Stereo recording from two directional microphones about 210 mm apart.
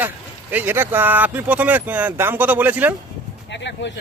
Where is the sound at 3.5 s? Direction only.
55° left (ahead or behind).